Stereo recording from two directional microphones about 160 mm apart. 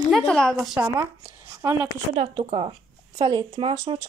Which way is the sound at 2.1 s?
35° right (ahead or behind).